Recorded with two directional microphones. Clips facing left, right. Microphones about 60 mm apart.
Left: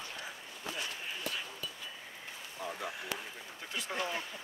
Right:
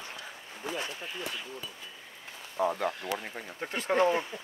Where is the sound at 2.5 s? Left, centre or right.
Right.